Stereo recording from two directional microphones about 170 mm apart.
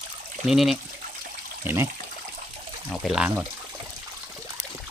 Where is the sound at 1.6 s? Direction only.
15° right (ahead or behind).